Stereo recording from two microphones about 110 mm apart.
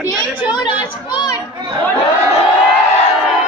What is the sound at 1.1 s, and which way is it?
Chatter, 45° left (ahead or behind).